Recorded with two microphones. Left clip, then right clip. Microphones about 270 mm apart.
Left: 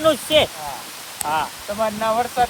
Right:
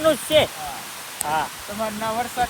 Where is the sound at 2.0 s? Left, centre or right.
Left.